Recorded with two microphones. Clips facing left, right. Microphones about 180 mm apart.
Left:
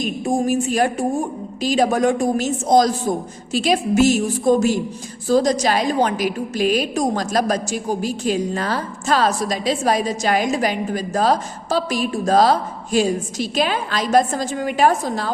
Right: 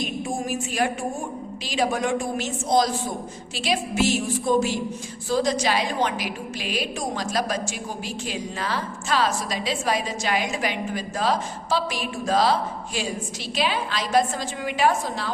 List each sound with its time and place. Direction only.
0.3 s a woman's voice: 40° left (ahead or behind)